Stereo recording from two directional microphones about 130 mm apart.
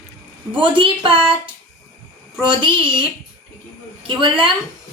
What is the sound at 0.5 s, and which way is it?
Speech, 40° right (ahead or behind).